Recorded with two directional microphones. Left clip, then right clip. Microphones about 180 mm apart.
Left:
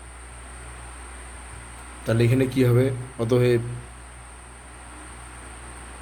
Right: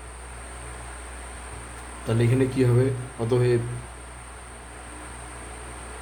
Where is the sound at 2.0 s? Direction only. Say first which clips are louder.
Left 2 dB; 50° left (ahead or behind).